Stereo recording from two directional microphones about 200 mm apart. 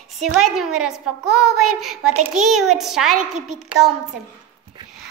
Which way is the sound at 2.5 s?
Centre (ahead or behind).